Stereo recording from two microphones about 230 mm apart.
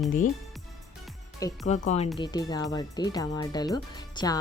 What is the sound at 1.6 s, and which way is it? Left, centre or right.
Speech, left.